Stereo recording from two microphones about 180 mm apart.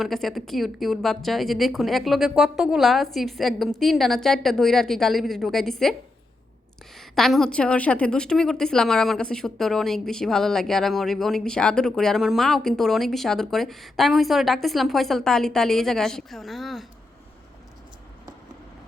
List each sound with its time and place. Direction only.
0.0 s a woman's voice: centre (ahead or behind)
7.2 s a woman's voice: centre (ahead or behind)